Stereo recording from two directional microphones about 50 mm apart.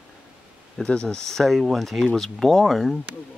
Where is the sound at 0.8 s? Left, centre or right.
Centre.